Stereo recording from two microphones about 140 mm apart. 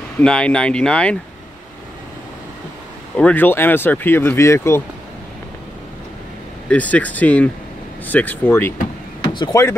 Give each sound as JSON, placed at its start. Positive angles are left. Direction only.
{"t": 0.2, "sound": "speech", "side_deg": 5}
{"t": 3.2, "sound": "speech", "side_deg": 10}
{"t": 6.7, "sound": "speech", "side_deg": 10}
{"t": 9.3, "sound": "speech", "side_deg": 35}